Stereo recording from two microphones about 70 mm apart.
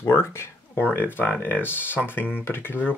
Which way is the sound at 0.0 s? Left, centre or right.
Left.